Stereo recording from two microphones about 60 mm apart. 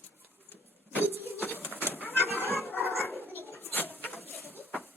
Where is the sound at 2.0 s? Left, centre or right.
Left.